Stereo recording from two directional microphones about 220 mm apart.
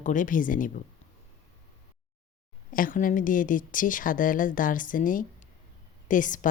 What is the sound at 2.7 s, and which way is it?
Speech, 40° left (ahead or behind).